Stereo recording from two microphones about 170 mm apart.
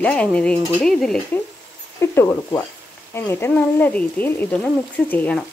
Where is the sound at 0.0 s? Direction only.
5° left (ahead or behind).